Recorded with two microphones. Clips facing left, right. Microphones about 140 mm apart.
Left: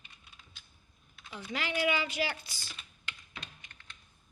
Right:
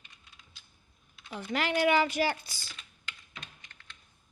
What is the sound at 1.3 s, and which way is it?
A woman's voice, 55° right (ahead or behind).